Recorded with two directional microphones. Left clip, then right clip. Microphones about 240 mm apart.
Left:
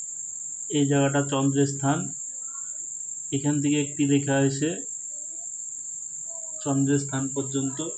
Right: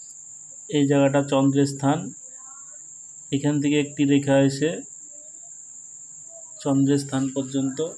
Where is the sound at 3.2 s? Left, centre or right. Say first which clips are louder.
Right 3 dB; right.